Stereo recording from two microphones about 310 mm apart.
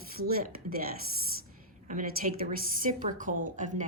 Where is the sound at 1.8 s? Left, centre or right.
Right.